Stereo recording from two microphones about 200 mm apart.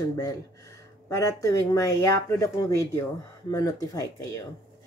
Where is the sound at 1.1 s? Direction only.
15° left (ahead or behind).